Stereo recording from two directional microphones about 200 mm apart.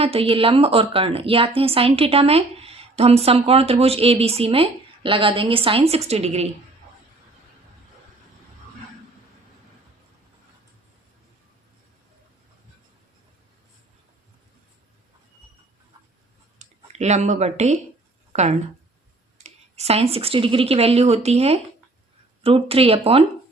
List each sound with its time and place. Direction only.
0.0 s a woman's voice: 30° right (ahead or behind)
16.6 s speech: 35° right (ahead or behind)
19.4 s a woman's voice: 30° right (ahead or behind)